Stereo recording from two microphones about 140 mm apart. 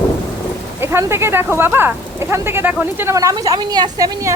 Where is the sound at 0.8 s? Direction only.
15° right (ahead or behind).